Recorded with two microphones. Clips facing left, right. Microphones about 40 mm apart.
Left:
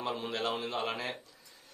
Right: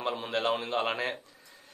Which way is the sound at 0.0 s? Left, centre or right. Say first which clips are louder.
Right 4 dB; right.